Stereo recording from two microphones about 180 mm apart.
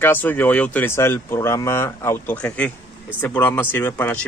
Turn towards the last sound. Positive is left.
turn(degrees=10)  # may be behind; listen again after turning